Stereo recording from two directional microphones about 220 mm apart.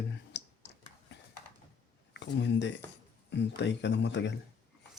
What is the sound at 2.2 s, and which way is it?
Speech, 55° left (ahead or behind).